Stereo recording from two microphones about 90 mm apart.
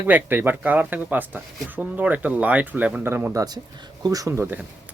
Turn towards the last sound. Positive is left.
turn(degrees=-20)  # may be behind; listen again after turning